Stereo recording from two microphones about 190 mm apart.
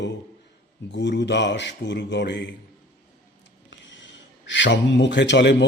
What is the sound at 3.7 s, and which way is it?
Speech, 75° left (ahead or behind).